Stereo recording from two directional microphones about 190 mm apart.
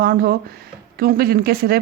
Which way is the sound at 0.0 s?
50° right (ahead or behind).